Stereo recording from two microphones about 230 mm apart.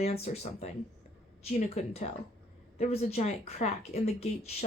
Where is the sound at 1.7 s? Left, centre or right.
Left.